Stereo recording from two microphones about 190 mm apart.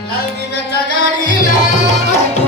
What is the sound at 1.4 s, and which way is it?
Music, 45° left (ahead or behind).